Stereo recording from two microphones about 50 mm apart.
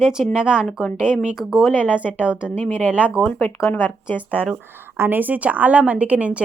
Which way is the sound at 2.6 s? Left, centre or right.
Left.